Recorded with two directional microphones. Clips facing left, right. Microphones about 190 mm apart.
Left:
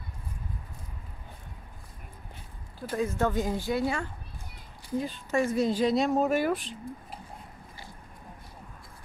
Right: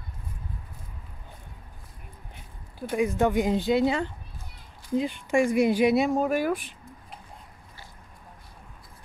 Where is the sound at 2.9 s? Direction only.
15° right (ahead or behind).